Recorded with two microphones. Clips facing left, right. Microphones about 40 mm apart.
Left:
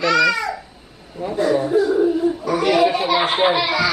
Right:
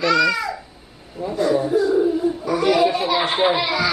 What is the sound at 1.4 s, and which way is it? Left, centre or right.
Speech, left.